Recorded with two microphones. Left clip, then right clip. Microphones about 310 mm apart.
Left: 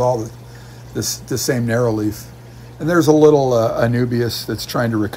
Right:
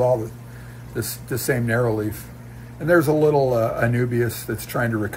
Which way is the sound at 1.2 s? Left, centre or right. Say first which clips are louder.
Left 2 dB; centre.